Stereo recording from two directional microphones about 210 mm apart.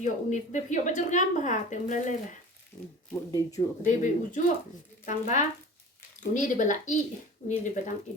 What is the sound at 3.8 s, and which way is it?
A woman's voice, 35° left (ahead or behind).